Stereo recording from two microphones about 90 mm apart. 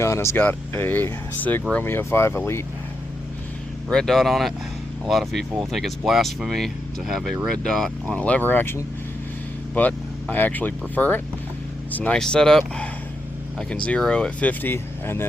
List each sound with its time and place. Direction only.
0.0 s speech: 30° left (ahead or behind)
3.8 s speech: 5° left (ahead or behind); by 15.3 s 25° left (ahead or behind)